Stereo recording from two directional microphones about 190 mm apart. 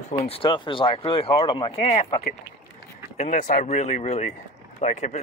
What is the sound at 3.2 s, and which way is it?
Speech, 40° left (ahead or behind).